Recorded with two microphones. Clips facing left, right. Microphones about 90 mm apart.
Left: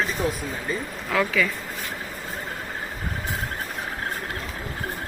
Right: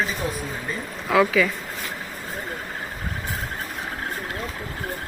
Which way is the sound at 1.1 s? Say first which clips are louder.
Right 4 dB; 10° right (ahead or behind).